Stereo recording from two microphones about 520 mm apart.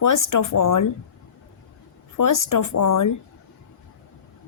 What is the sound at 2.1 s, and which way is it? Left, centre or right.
Speech, left.